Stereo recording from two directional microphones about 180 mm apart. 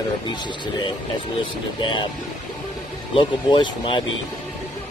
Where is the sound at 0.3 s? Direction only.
25° left (ahead or behind).